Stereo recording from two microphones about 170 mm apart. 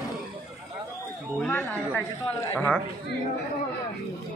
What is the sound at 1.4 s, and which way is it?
Speech, 10° left (ahead or behind).